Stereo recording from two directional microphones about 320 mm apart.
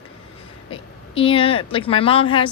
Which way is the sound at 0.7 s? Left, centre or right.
Centre.